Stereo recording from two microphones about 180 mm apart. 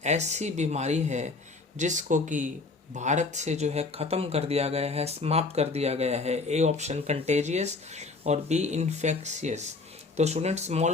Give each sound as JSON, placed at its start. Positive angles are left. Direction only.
{"t": 0.0, "sound": "speech", "side_deg": -40}